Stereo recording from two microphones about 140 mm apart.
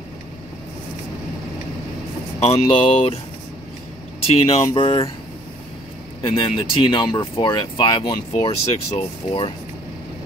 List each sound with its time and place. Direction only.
2.4 s speech: 45° left (ahead or behind)
4.2 s speech: 45° left (ahead or behind)
6.2 s speech: 40° left (ahead or behind)
8.3 s speech: 50° left (ahead or behind)